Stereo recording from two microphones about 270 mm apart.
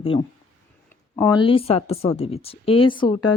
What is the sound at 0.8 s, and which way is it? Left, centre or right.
Speech, centre.